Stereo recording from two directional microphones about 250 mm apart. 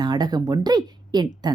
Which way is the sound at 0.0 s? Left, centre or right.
Centre.